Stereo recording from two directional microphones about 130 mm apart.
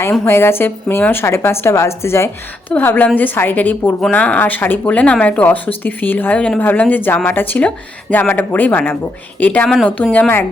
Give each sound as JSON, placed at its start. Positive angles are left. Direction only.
{"t": 0.3, "sound": "speech", "side_deg": 20}